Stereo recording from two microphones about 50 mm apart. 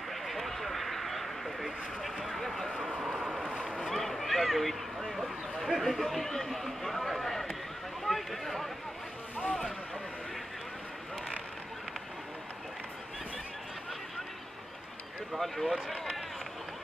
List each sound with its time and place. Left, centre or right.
0.1 s a sound: centre
2.0 s vehicle: centre
3.0 s vehicle: centre
3.4 s boat: centre
3.9 s a sound: centre
5.0 s speech: centre
5.6 s speech: centre
15.3 s speech: centre